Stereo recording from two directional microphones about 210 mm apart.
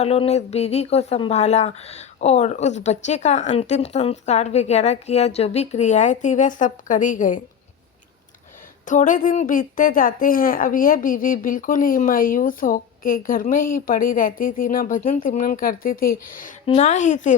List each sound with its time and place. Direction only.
0.0 s a woman's voice: 30° left (ahead or behind)
8.9 s a woman's voice: 40° left (ahead or behind)